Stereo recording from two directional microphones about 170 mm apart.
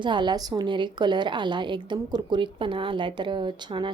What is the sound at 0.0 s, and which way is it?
A woman's voice, 25° right (ahead or behind).